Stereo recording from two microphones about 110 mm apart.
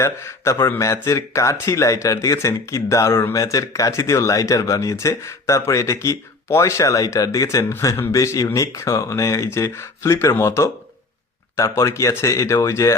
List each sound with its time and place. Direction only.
0.0 s speech: 25° left (ahead or behind)